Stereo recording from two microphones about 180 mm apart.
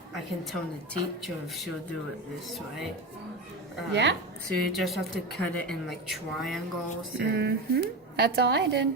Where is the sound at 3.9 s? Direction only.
75° right (ahead or behind).